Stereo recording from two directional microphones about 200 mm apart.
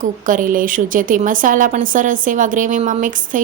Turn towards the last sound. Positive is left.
turn(degrees=-40)  # may be behind; listen again after turning